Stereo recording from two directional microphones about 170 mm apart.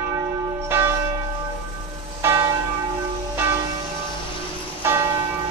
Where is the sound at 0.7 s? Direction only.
15° right (ahead or behind).